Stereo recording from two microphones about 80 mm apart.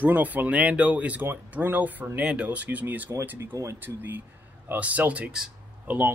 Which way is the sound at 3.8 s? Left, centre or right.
Right.